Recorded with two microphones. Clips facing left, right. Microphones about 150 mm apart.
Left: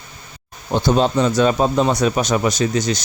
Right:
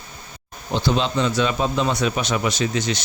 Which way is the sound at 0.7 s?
45° left (ahead or behind).